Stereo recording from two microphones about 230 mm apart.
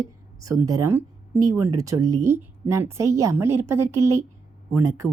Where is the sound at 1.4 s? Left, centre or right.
Right.